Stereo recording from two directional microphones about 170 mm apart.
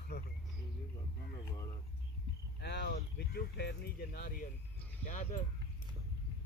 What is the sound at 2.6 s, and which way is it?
Speech, 80° left.